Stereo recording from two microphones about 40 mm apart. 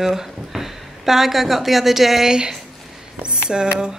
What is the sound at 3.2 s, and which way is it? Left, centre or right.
Speech, right.